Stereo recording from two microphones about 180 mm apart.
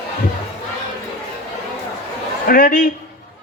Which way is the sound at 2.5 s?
55° left (ahead or behind).